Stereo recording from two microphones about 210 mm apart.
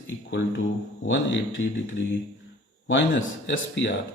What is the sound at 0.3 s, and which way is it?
Speech, 60° left (ahead or behind).